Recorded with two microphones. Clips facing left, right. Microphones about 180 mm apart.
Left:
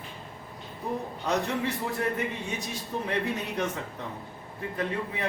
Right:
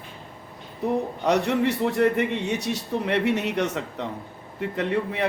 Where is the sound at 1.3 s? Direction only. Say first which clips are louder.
Right 6 dB; 75° right (ahead or behind).